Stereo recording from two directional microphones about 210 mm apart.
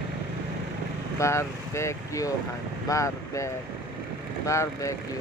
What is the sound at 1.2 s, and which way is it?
Speech, 15° left (ahead or behind).